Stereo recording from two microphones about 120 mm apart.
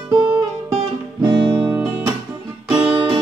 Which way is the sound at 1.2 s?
40° right (ahead or behind).